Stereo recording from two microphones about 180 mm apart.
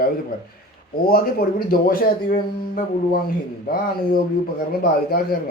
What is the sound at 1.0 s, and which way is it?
Speech, 55° left (ahead or behind).